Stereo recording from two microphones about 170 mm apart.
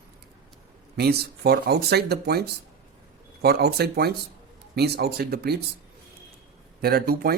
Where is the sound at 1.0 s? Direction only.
70° right (ahead or behind).